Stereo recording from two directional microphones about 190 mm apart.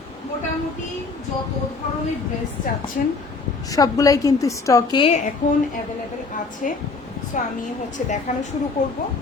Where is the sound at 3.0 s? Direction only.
45° left (ahead or behind).